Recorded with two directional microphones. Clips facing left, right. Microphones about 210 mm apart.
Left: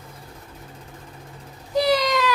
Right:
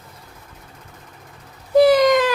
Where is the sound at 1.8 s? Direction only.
50° right (ahead or behind).